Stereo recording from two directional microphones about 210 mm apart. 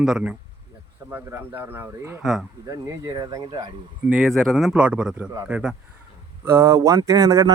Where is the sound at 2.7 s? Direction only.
15° right (ahead or behind).